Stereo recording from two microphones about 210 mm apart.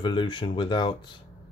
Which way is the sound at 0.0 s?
20° left (ahead or behind).